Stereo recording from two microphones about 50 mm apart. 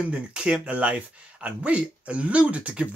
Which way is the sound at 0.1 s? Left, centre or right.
Centre.